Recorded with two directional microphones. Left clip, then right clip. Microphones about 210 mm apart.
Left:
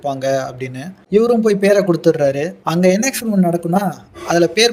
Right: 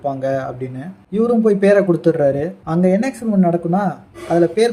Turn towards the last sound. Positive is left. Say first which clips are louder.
# left 1 dB
turn(degrees=40)  # may be behind; listen again after turning